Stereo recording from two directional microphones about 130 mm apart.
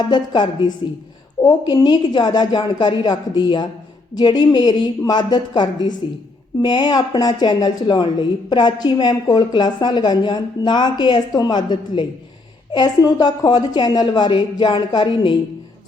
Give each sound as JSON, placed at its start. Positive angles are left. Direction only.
{"t": 0.0, "sound": "speech", "side_deg": 35}